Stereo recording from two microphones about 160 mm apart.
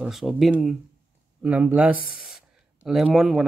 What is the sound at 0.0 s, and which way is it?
Speech, 5° right (ahead or behind).